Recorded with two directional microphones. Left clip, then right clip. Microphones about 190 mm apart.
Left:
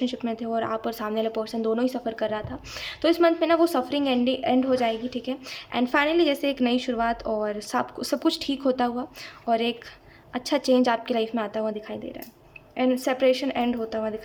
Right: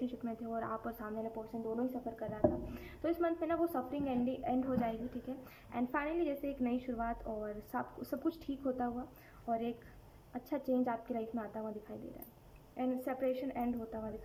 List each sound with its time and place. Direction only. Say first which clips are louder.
0.0 s speech: left 13 dB; 15° left (ahead or behind)
0.9 s a woman's voice: left 16 dB; 30° left (ahead or behind)